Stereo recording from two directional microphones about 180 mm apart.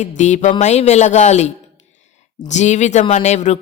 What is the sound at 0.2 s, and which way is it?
Speech, 40° left (ahead or behind).